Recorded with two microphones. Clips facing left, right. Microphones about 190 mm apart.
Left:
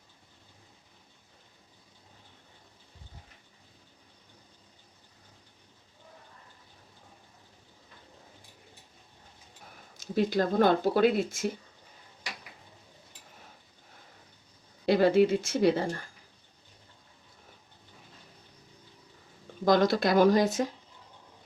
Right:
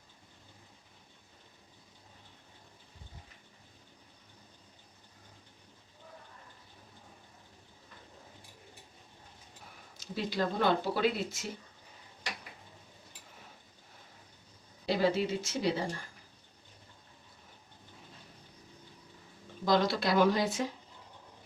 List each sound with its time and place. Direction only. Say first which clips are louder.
10.0 s speech: left 7 dB; 50° left (ahead or behind)
14.8 s speech: left 7 dB; 55° left (ahead or behind)
19.6 s speech: left 5 dB; 50° left (ahead or behind)